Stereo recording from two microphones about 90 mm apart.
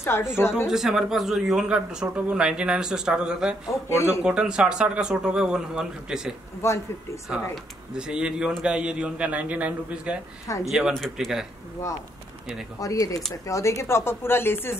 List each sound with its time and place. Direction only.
0.0 s a woman's voice: 30° left (ahead or behind)
0.7 s a man's voice: 5° right (ahead or behind)
3.9 s speech: 35° left (ahead or behind)
4.2 s a man's voice: 10° right (ahead or behind)
6.6 s speech: 30° left (ahead or behind)
7.2 s a man's voice: 5° right (ahead or behind)
10.4 s speech: 35° left (ahead or behind)
10.7 s speech: centre (ahead or behind)
12.8 s a woman's voice: 40° left (ahead or behind)